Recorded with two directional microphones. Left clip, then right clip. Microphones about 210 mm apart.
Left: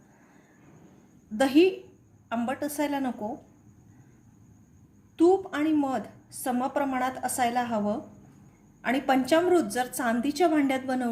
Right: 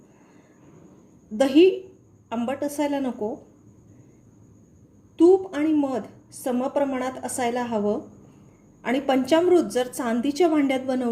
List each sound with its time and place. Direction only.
1.4 s a woman's voice: 20° left (ahead or behind)
5.1 s a woman's voice: 20° left (ahead or behind)